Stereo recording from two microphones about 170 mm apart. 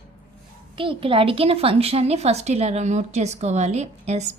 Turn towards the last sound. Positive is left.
turn(degrees=-40)  # may be behind; listen again after turning